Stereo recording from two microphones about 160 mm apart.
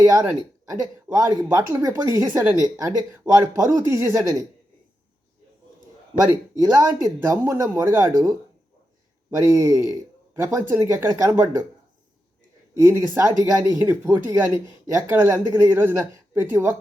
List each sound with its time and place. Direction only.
0.0 s speech: 20° right (ahead or behind)
6.7 s speech: 20° right (ahead or behind)
13.1 s speech: 20° right (ahead or behind)